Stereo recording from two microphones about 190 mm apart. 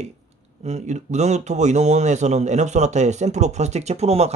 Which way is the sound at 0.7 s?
35° right (ahead or behind).